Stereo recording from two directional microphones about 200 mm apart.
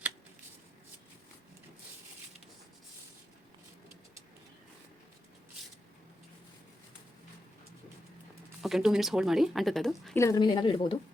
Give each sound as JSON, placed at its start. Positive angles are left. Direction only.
{"t": 8.6, "sound": "speech", "side_deg": 0}
{"t": 10.2, "sound": "speech", "side_deg": 20}